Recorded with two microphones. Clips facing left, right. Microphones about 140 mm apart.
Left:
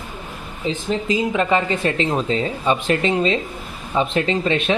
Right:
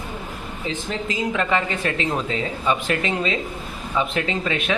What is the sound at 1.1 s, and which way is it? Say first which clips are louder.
Speech: left 3 dB; 20° left (ahead or behind).